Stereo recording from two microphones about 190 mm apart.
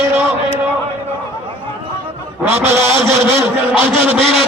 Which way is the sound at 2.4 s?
10° right (ahead or behind).